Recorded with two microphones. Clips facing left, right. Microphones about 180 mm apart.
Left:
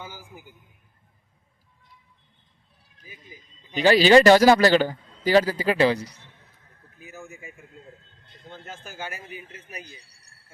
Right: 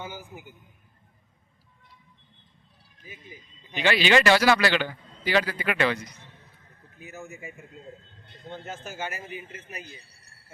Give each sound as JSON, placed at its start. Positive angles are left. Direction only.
{"t": 3.8, "sound": "a man's voice", "side_deg": 40}
{"t": 9.8, "sound": "speech", "side_deg": -25}